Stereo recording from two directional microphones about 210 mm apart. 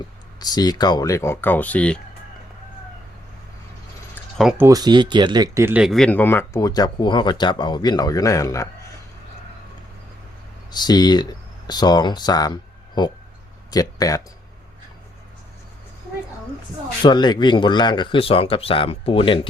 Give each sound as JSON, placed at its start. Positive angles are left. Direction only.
{"t": 0.3, "sound": "speech", "side_deg": 20}
{"t": 4.1, "sound": "a sound", "side_deg": 0}
{"t": 4.6, "sound": "speech", "side_deg": -15}
{"t": 10.7, "sound": "speech", "side_deg": 20}
{"t": 17.0, "sound": "speech", "side_deg": 20}